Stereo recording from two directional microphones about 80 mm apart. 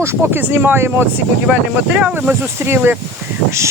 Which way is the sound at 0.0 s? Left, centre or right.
Right.